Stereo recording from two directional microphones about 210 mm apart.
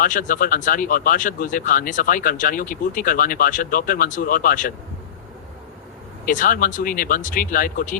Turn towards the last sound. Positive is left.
turn(degrees=40)  # may be behind; listen again after turning